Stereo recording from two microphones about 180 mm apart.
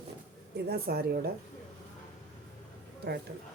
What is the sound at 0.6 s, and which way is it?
Speech, 60° right (ahead or behind).